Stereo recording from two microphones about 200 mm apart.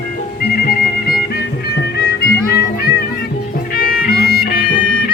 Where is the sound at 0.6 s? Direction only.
50° left (ahead or behind).